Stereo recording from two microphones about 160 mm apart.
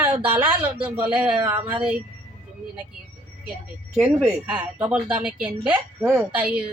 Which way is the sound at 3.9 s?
Centre (ahead or behind).